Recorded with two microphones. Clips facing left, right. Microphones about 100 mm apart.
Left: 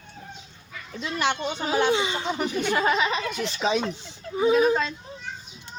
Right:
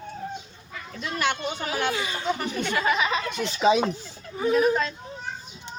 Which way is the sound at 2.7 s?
30° left (ahead or behind).